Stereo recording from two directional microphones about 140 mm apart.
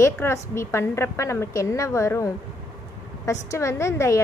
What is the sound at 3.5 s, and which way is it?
Speech, 20° left (ahead or behind).